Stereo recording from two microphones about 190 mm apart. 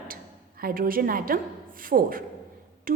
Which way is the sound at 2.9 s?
50° right (ahead or behind).